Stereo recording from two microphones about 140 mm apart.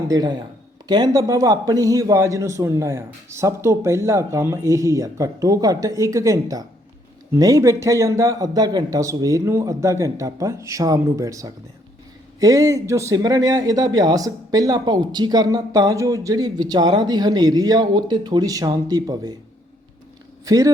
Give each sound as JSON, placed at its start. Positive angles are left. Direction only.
{"t": 0.1, "sound": "a man's voice", "side_deg": -30}
{"t": 20.4, "sound": "speech", "side_deg": -25}